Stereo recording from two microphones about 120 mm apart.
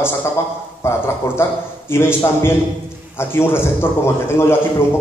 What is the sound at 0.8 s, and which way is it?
A man's voice, 20° left (ahead or behind).